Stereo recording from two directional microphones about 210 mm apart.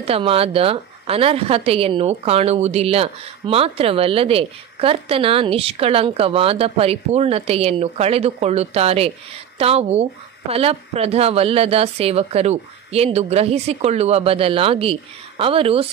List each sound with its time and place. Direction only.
0.0 s a woman's voice: 25° right (ahead or behind)